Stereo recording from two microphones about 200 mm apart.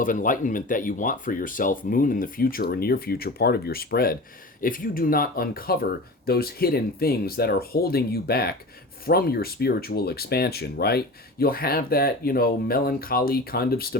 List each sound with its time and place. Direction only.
0.0 s speech: 40° left (ahead or behind)